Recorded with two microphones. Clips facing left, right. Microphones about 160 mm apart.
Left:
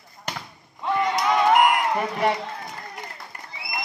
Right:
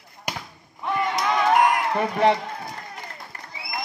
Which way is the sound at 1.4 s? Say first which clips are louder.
Left 1 dB; 20° left (ahead or behind).